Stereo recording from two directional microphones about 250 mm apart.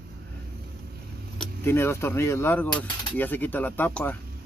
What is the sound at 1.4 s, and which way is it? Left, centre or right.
Speech, centre.